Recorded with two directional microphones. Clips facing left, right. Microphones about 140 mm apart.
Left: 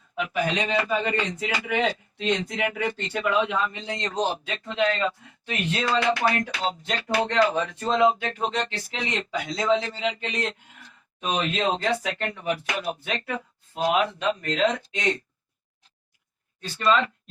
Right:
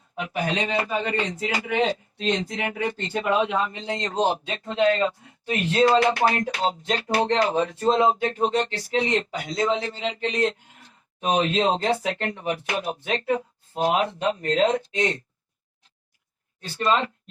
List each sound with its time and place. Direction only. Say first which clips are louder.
0.2 s a man's voice: even; 30° right (ahead or behind)
16.8 s a man's voice: even; 35° right (ahead or behind)